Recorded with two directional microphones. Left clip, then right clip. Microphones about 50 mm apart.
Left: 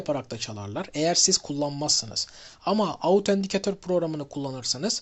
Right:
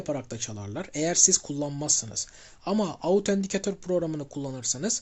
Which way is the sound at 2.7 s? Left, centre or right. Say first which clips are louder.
Left 3 dB; right.